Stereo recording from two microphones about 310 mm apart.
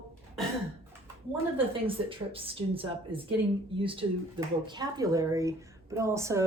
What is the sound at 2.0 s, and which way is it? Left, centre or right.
A woman's voice, centre.